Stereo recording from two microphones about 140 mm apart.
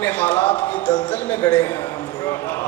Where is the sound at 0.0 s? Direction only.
10° left (ahead or behind).